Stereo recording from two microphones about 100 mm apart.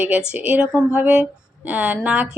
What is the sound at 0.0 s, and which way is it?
A woman's voice, 10° right (ahead or behind).